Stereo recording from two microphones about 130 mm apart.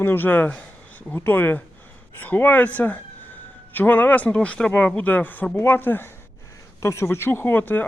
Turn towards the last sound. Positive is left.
turn(degrees=15)  # may be behind; listen again after turning